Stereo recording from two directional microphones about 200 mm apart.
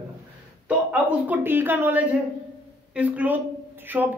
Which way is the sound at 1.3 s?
10° right (ahead or behind).